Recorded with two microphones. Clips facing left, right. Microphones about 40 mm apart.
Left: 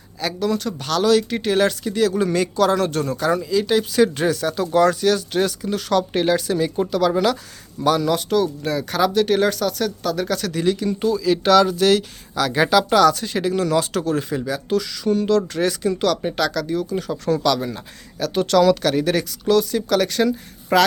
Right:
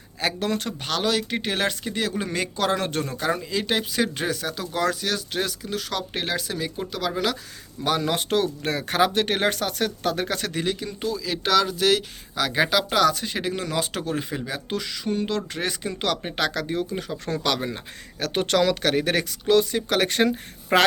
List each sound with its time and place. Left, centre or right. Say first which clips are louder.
0.2 s speech: left 3 dB; right
0.8 s speech: left 10 dB; centre
3.9 s speech: left 7 dB; centre
8.0 s speech: left 4 dB; right
10.6 s speech: left 8 dB; centre
10.8 s speech: left 9 dB; centre; by 16.9 s right
16.9 s speech: left 7 dB; centre
17.4 s speech: left 5 dB; right